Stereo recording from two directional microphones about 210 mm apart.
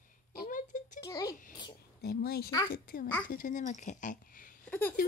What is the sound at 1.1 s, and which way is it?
Speech, 15° left (ahead or behind).